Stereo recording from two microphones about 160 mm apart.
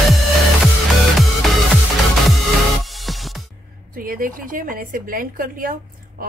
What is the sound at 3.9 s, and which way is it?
A woman's voice, 60° right (ahead or behind).